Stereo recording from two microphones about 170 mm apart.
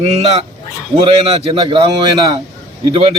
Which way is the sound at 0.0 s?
40° right (ahead or behind).